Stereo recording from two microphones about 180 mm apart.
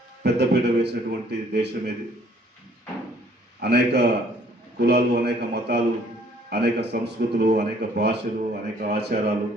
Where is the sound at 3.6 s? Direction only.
65° right (ahead or behind).